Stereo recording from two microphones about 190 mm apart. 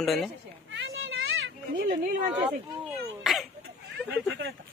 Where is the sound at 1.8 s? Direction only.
45° right (ahead or behind).